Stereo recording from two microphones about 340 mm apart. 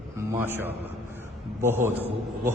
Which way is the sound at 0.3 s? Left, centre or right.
Centre.